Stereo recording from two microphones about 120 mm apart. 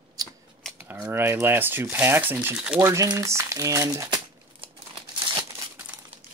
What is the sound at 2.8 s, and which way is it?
Speech, 25° right (ahead or behind).